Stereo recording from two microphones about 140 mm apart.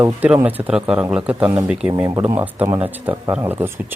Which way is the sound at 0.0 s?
15° right (ahead or behind).